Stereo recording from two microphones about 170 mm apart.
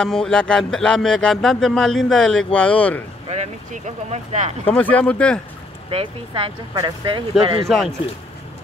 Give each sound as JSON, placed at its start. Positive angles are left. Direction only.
{"t": 0.0, "sound": "speech", "side_deg": 5}
{"t": 3.3, "sound": "speech", "side_deg": -40}
{"t": 4.6, "sound": "speech", "side_deg": 10}
{"t": 5.9, "sound": "speech", "side_deg": -35}
{"t": 7.6, "sound": "speech", "side_deg": 0}